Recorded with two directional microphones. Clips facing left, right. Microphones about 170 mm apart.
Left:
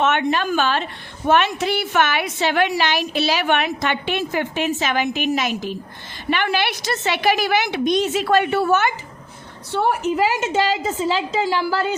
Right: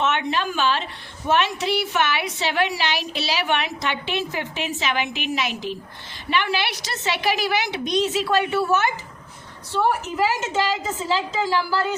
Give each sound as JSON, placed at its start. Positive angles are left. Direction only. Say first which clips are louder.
{"t": 0.0, "sound": "a woman's voice", "louder": "left 4 dB", "side_deg": 55}